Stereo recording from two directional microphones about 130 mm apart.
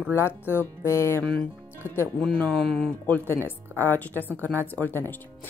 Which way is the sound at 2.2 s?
5° left (ahead or behind).